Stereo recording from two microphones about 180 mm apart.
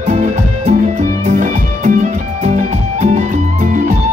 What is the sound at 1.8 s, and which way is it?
Music, 40° right (ahead or behind).